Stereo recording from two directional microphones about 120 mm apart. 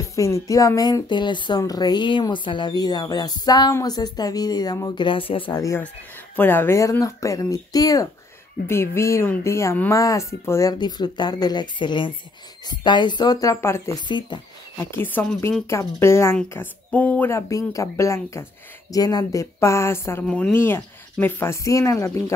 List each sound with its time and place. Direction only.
0.1 s speech: 25° left (ahead or behind); by 5.5 s 45° left (ahead or behind)
5.5 s speech: 25° left (ahead or behind)
6.3 s speech: 15° left (ahead or behind)
13.9 s speech: 40° left (ahead or behind)
14.8 s speech: 20° left (ahead or behind)
20.2 s speech: 5° left (ahead or behind)
20.5 s speech: 20° left (ahead or behind)